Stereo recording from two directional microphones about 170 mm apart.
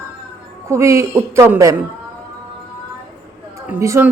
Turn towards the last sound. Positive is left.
turn(degrees=-15)  # may be behind; listen again after turning